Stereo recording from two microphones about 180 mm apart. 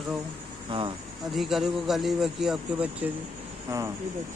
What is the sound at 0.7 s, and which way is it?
Speech, 25° right (ahead or behind).